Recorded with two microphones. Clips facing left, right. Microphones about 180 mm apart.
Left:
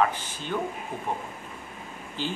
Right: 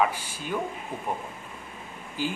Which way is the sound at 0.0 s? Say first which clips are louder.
Even; 10° right (ahead or behind).